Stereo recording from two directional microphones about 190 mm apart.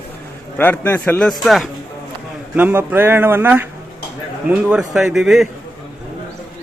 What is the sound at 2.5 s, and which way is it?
A man's voice, 10° right (ahead or behind).